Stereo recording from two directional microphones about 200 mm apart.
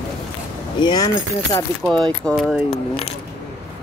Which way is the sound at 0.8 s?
20° left (ahead or behind).